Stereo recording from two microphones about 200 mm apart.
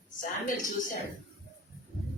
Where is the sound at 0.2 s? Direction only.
40° left (ahead or behind).